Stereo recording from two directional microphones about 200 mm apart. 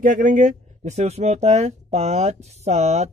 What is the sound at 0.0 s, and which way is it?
Speech, 40° right (ahead or behind).